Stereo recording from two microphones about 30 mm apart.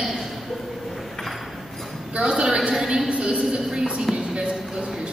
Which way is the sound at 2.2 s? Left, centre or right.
Right.